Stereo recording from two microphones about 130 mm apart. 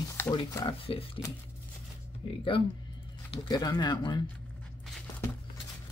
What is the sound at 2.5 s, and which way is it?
Speech, 40° left (ahead or behind).